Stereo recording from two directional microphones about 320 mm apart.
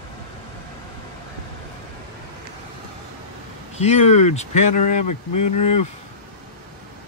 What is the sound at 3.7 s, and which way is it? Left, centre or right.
Speech, centre.